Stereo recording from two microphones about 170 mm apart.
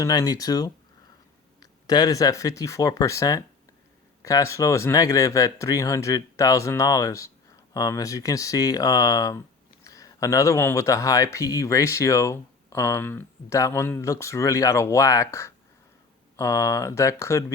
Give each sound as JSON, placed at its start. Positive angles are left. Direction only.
{"t": 0.0, "sound": "speech", "side_deg": 20}
{"t": 1.9, "sound": "speech", "side_deg": 20}